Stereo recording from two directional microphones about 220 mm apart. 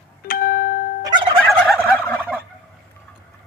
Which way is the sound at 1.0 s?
20° right (ahead or behind).